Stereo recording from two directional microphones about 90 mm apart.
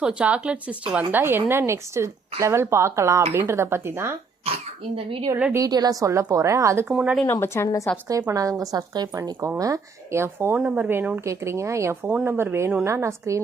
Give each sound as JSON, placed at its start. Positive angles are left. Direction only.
{"t": 0.0, "sound": "a woman's voice", "side_deg": -10}
{"t": 4.4, "sound": "cough", "side_deg": -90}
{"t": 5.5, "sound": "a woman's voice", "side_deg": -45}
{"t": 6.8, "sound": "speech", "side_deg": -15}
{"t": 7.3, "sound": "a woman's voice", "side_deg": 30}
{"t": 8.3, "sound": "a woman's voice", "side_deg": -40}